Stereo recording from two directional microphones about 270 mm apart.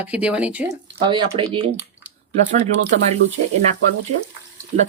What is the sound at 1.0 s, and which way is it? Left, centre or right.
Speech, centre.